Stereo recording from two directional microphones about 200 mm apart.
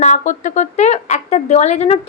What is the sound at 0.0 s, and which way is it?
A woman's voice, 40° left (ahead or behind).